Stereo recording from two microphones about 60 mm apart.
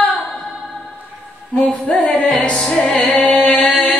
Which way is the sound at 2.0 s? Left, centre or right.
Left.